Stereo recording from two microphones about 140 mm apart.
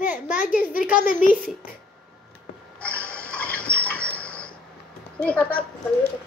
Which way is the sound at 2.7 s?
10° left (ahead or behind).